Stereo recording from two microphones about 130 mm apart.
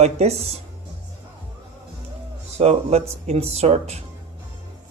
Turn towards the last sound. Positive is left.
turn(degrees=-55)  # may be behind; listen again after turning